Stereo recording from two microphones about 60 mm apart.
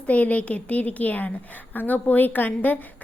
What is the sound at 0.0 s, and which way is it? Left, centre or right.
A woman's voice, left.